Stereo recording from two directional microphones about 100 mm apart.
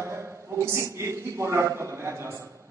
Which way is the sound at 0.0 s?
25° right (ahead or behind).